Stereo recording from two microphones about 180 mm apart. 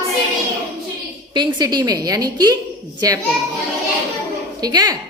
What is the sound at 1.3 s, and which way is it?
A woman's voice, 25° right (ahead or behind).